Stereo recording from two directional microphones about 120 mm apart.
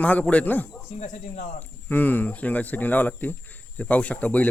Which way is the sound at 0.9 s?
90° left.